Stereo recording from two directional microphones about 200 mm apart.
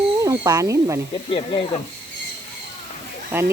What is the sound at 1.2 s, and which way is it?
Speech, 30° left (ahead or behind).